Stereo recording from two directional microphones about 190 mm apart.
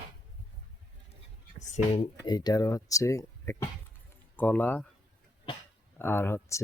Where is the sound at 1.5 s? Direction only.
35° left (ahead or behind).